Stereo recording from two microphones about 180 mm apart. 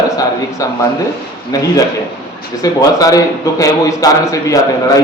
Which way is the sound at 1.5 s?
20° left (ahead or behind).